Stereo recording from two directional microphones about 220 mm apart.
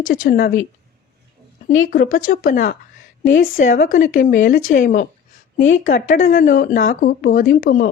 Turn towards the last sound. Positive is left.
turn(degrees=40)  # may be behind; listen again after turning